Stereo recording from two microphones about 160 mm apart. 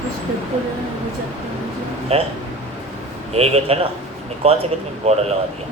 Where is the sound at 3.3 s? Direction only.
40° right (ahead or behind).